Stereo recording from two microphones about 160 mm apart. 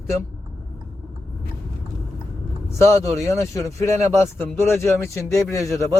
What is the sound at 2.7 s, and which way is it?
Speech, 15° left (ahead or behind).